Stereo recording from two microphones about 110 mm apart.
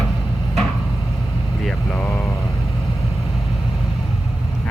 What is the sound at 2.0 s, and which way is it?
Vehicle, 20° left (ahead or behind).